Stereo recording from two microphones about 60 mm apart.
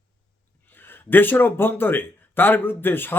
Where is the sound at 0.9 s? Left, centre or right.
Left.